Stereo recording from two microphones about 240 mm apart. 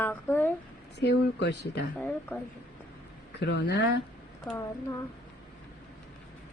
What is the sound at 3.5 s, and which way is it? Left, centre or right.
Speech, left.